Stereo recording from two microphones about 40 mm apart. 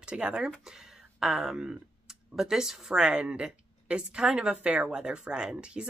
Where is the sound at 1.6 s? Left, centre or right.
Right.